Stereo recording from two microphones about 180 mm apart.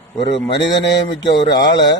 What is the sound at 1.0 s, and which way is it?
Speech, 25° left (ahead or behind).